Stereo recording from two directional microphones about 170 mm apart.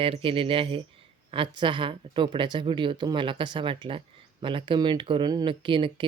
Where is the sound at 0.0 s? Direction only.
30° right (ahead or behind).